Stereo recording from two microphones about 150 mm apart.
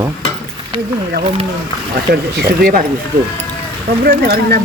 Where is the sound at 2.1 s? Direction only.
90° right.